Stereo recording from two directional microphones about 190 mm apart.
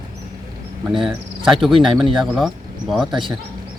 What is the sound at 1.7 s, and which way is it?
Speech, 25° right (ahead or behind).